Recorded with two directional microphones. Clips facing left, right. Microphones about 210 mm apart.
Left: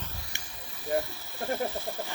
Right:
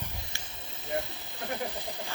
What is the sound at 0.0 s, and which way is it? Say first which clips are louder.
Snake: right 1 dB; 20° right (ahead or behind).